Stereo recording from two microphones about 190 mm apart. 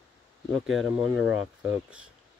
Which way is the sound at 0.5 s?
Centre (ahead or behind).